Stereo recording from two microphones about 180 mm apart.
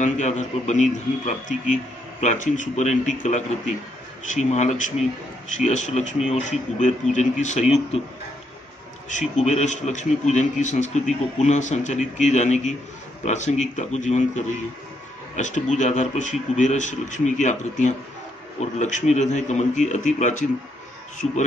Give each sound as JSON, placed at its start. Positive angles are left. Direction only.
{"t": 0.0, "sound": "a man's voice", "side_deg": 40}
{"t": 9.1, "sound": "a man's voice", "side_deg": 40}